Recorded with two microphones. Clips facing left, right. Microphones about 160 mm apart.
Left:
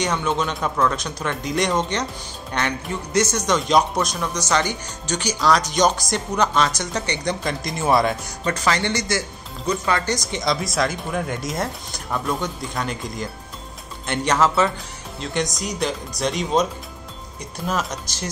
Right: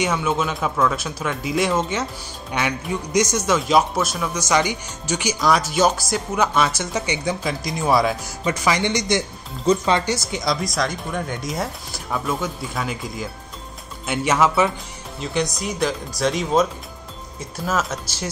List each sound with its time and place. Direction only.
0.0 s speech: 5° right (ahead or behind); by 10.0 s 20° right (ahead or behind)
10.0 s speech: 5° right (ahead or behind)
17.7 s speech: 5° right (ahead or behind)